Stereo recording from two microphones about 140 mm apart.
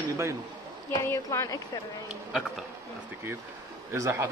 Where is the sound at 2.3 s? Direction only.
5° right (ahead or behind).